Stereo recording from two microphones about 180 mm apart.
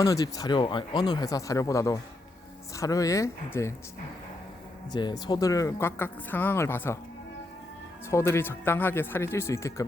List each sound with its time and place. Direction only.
0.0 s speech: 20° left (ahead or behind)
4.9 s speech: 25° left (ahead or behind)
8.1 s speech: 15° left (ahead or behind)